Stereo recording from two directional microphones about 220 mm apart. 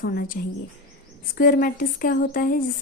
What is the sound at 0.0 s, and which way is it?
Speech, 40° left (ahead or behind).